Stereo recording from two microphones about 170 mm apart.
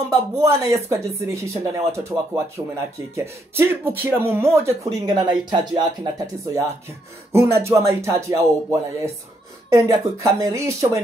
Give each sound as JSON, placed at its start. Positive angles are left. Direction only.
{"t": 0.1, "sound": "speech", "side_deg": -20}